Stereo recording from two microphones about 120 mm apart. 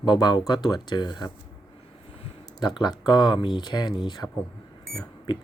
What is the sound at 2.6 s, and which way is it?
Speech, 35° left (ahead or behind).